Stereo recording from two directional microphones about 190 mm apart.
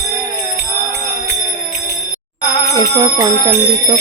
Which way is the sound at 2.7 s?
25° right (ahead or behind).